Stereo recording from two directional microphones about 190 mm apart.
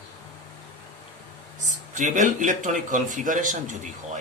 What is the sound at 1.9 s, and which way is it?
Speech, 40° right (ahead or behind).